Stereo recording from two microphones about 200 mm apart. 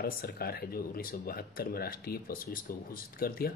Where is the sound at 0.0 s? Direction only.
50° left (ahead or behind).